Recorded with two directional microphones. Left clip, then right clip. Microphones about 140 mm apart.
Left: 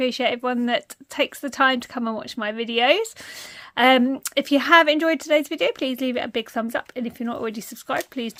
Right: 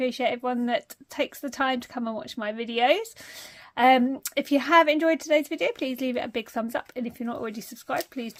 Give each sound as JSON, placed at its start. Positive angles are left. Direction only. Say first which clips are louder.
{"t": 0.0, "sound": "speech", "louder": "left 4 dB", "side_deg": 25}